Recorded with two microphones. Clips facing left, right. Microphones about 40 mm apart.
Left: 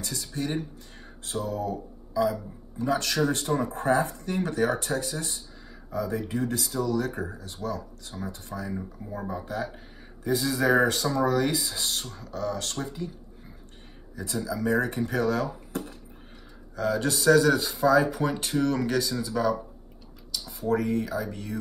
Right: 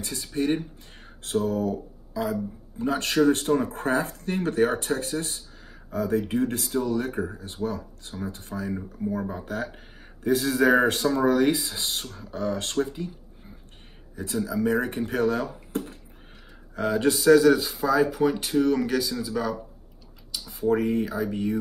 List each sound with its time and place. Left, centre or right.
0.0 s speech: right
2.8 s speech: right
14.1 s speech: right
17.1 s speech: centre
20.2 s speech: centre